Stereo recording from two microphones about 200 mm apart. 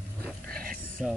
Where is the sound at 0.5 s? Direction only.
45° right (ahead or behind).